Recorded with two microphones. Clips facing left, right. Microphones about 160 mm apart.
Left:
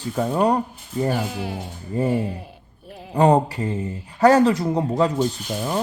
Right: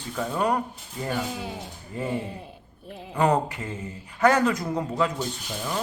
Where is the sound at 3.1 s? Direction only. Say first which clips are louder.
Left 6 dB; 30° left (ahead or behind).